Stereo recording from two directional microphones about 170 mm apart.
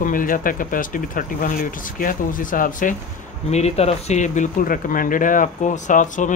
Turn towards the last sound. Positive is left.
turn(degrees=50)  # may be behind; listen again after turning